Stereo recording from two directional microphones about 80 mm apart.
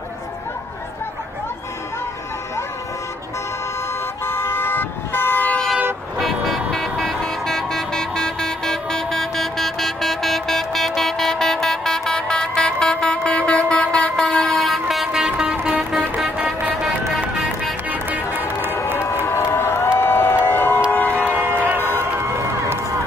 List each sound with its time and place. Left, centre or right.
4.3 s vehicle: left
6.1 s vehicle: centre
15.2 s music: centre
17.8 s music: right
19.2 s music: left
20.9 s train: left
21.3 s a sound: right